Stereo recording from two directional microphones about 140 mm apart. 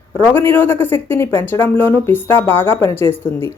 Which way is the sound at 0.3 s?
15° left (ahead or behind).